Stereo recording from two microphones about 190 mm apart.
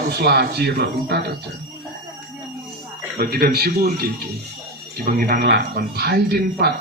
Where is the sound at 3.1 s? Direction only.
55° right (ahead or behind).